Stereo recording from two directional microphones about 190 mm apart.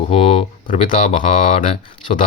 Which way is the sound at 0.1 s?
30° left (ahead or behind).